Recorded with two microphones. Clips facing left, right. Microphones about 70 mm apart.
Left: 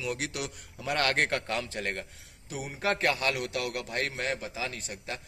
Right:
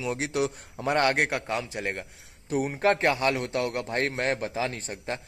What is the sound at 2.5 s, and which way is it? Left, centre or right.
A man's voice, right.